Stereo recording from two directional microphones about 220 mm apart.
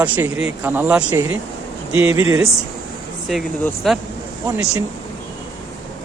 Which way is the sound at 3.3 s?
Centre (ahead or behind).